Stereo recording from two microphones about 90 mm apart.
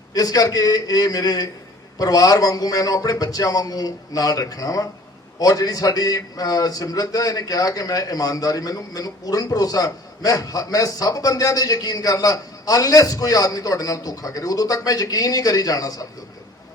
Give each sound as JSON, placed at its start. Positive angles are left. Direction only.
{"t": 0.1, "sound": "a man's voice", "side_deg": 45}